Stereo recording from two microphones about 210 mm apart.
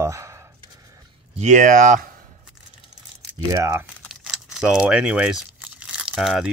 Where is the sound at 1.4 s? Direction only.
35° right (ahead or behind).